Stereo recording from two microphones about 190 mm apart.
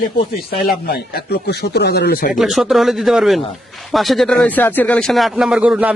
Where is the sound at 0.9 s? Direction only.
55° left (ahead or behind).